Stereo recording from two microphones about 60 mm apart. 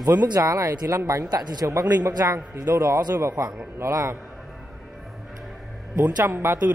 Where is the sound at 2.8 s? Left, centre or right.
Right.